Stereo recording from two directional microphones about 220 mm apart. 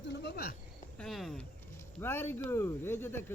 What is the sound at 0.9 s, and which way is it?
Speech, centre (ahead or behind).